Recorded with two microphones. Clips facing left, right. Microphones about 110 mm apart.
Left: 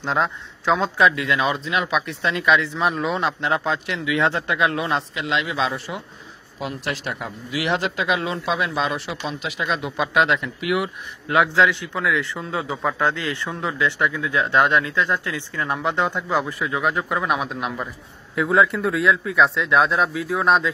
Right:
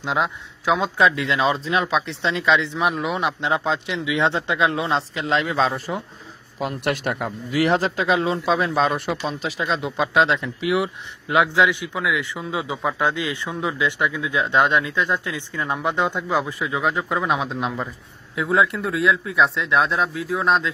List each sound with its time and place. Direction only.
0.0 s speech: 5° right (ahead or behind)
0.7 s speech: 20° right (ahead or behind); by 6.0 s 35° right (ahead or behind)
6.8 s speech: 50° right (ahead or behind)
7.5 s a man's voice: 40° right (ahead or behind)
9.3 s speech: 35° right (ahead or behind)
18.3 s speech: centre (ahead or behind)